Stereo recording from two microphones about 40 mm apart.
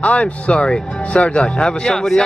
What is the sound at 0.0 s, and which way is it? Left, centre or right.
Speech, left.